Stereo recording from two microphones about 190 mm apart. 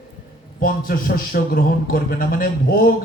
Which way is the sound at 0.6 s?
50° left (ahead or behind).